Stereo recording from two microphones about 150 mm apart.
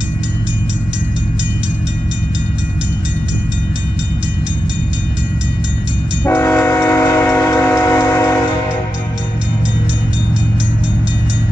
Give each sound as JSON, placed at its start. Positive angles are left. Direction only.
{"t": 6.2, "sound": "tick-tock", "side_deg": 15}